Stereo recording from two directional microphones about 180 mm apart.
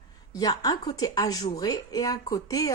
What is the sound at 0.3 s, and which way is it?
Speech, 20° left (ahead or behind).